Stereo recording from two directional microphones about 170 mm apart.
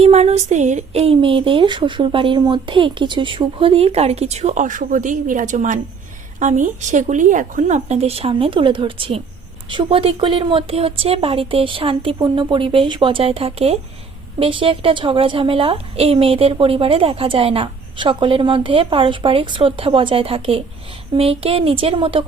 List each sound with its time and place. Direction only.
0.0 s a woman's voice: 40° right (ahead or behind)